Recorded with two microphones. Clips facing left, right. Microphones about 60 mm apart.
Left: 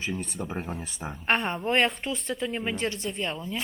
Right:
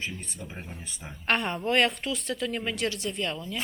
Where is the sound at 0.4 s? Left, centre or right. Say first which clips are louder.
Left 8 dB; left.